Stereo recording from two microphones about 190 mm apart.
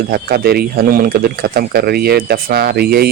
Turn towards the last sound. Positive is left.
turn(degrees=-55)  # may be behind; listen again after turning